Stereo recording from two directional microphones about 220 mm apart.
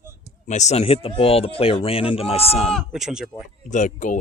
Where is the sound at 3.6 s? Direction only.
35° left (ahead or behind).